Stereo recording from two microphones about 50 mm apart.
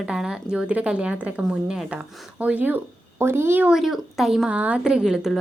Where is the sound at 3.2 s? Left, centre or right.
Right.